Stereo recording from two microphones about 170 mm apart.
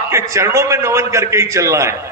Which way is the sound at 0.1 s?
15° right (ahead or behind).